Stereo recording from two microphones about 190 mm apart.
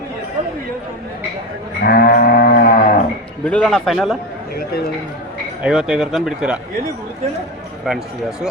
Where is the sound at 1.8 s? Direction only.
55° left (ahead or behind).